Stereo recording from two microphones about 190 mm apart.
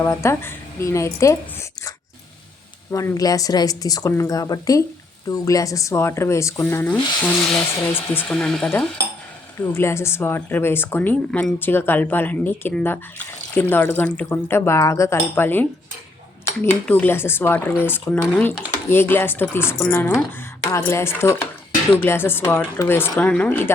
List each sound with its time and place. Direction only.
0.0 s speech: 15° left (ahead or behind)
2.9 s speech: 15° left (ahead or behind)